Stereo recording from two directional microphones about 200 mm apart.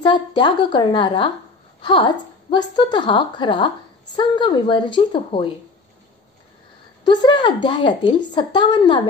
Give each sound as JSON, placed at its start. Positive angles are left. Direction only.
{"t": 0.0, "sound": "a woman's voice", "side_deg": 25}
{"t": 7.1, "sound": "a woman's voice", "side_deg": 20}